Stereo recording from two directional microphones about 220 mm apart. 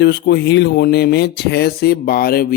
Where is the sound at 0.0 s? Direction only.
50° left (ahead or behind).